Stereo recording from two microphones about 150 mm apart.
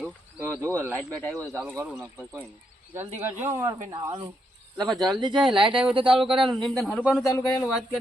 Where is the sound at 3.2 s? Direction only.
15° right (ahead or behind).